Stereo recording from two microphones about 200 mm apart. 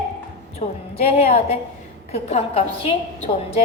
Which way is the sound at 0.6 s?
35° left (ahead or behind).